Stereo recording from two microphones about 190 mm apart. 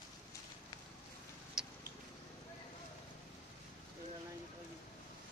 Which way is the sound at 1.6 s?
5° right (ahead or behind).